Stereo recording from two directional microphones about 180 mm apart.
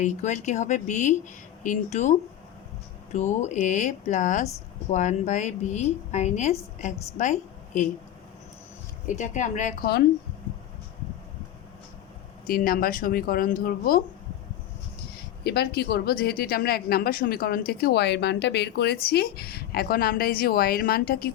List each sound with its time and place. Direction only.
0.0 s a woman's voice: 40° left (ahead or behind)
9.0 s speech: 45° left (ahead or behind)
12.5 s speech: 55° left (ahead or behind)
15.1 s speech: 60° left (ahead or behind)